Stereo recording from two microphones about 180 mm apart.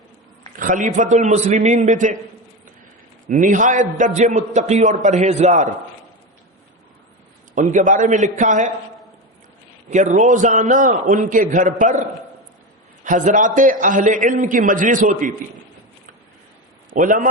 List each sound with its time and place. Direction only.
0.5 s a man's voice: 45° right (ahead or behind)
3.2 s a man's voice: 45° right (ahead or behind)
7.5 s a man's voice: 45° right (ahead or behind)
9.9 s a man's voice: 45° right (ahead or behind)
13.1 s a man's voice: 45° right (ahead or behind)
16.9 s a man's voice: 45° right (ahead or behind)